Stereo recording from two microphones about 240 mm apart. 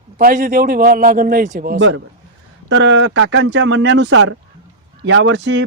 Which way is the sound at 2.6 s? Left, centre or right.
Right.